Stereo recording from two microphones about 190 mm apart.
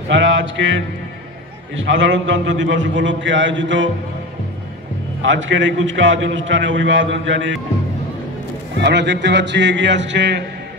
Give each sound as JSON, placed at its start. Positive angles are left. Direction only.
{"t": 0.1, "sound": "a man's voice", "side_deg": -80}
{"t": 1.8, "sound": "a man's voice", "side_deg": -85}
{"t": 5.2, "sound": "a man's voice", "side_deg": -75}
{"t": 8.7, "sound": "a man's voice", "side_deg": -65}